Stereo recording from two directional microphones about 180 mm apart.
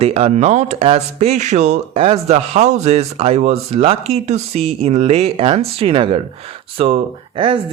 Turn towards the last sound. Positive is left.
turn(degrees=-30)  # may be behind; listen again after turning